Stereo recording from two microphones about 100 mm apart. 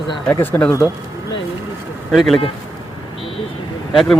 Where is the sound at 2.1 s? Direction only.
Centre (ahead or behind).